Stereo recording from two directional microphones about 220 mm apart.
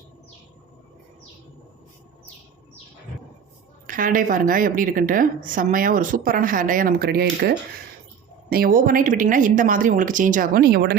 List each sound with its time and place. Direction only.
3.8 s a woman's voice: 40° right (ahead or behind)